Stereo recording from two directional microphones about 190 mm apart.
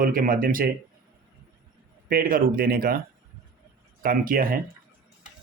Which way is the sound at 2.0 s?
50° right (ahead or behind).